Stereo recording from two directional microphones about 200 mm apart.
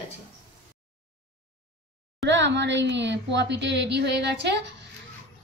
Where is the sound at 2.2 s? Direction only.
65° right (ahead or behind).